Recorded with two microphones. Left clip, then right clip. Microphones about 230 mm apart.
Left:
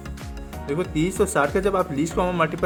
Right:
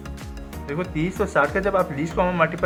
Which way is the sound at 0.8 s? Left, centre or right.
Left.